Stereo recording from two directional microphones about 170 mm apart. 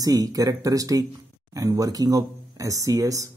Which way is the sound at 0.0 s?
20° right (ahead or behind).